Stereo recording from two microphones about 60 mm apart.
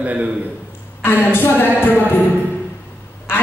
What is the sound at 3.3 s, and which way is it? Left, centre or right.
Quack, left.